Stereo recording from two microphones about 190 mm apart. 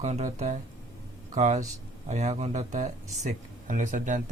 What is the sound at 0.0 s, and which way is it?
Speech, 40° right (ahead or behind).